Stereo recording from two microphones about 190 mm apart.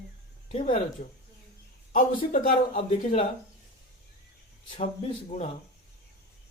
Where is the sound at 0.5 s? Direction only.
40° left (ahead or behind).